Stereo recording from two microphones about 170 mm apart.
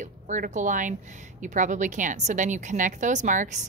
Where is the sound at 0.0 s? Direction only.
45° right (ahead or behind).